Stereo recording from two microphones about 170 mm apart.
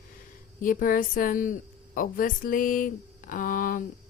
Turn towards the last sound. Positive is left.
turn(degrees=55)  # may be behind; listen again after turning